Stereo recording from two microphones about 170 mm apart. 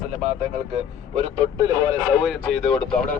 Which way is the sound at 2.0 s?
5° right (ahead or behind).